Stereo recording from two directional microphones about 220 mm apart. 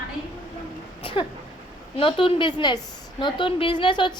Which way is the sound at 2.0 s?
25° left (ahead or behind).